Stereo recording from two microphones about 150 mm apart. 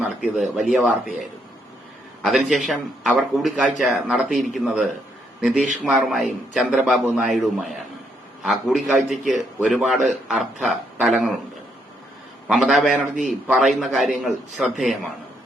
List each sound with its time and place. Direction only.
0.2 s speech: 5° right (ahead or behind)
2.2 s a man's voice: centre (ahead or behind)
12.5 s speech: centre (ahead or behind)